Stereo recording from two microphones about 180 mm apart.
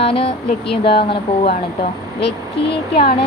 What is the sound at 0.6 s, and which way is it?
Speech, 70° left (ahead or behind).